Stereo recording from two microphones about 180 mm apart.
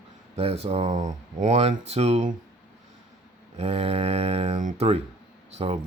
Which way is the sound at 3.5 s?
35° right (ahead or behind).